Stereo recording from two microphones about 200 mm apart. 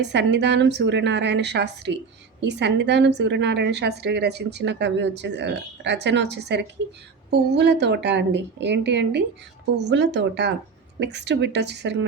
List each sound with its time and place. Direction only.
0.0 s a woman's voice: 60° right (ahead or behind)